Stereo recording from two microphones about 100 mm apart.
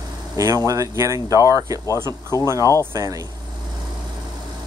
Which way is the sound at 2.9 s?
40° right (ahead or behind).